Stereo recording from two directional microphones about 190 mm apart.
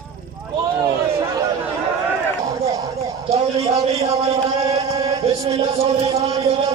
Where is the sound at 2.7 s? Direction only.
15° right (ahead or behind).